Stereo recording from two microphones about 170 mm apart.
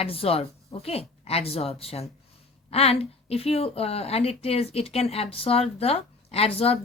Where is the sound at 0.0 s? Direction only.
35° left (ahead or behind).